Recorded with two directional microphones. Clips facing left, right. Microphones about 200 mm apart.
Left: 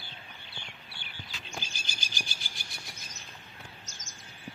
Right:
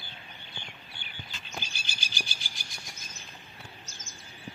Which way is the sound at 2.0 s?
50° left (ahead or behind).